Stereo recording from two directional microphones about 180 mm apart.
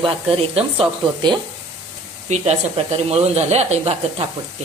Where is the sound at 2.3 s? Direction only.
40° right (ahead or behind).